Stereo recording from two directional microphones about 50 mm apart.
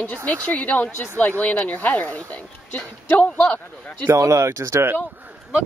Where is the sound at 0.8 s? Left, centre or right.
Left.